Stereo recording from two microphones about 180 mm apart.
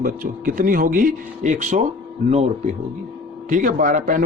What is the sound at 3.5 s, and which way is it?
Speech, 45° right (ahead or behind).